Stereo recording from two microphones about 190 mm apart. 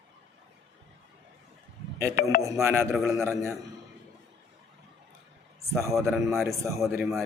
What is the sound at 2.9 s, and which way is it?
Speech, centre (ahead or behind).